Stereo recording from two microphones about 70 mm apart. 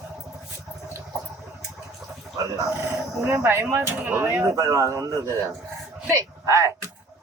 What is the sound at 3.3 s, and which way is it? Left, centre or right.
Speech, right.